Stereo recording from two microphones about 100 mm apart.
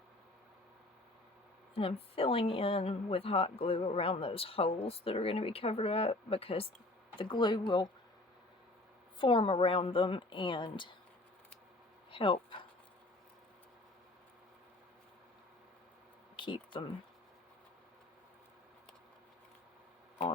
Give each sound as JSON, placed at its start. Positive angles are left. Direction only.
{"t": 1.7, "sound": "a woman's voice", "side_deg": 70}
{"t": 7.2, "sound": "speech", "side_deg": 55}
{"t": 9.1, "sound": "a woman's voice", "side_deg": 60}
{"t": 12.1, "sound": "speech", "side_deg": 60}
{"t": 16.3, "sound": "a sound", "side_deg": 55}